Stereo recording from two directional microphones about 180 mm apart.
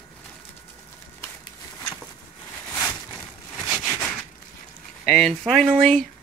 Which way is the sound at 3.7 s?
10° left (ahead or behind).